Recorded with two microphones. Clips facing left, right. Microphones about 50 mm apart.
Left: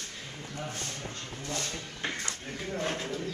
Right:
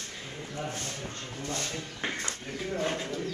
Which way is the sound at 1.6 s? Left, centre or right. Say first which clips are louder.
Right 1 dB; centre.